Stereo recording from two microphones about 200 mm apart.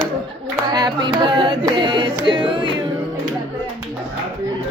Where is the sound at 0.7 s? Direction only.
20° right (ahead or behind).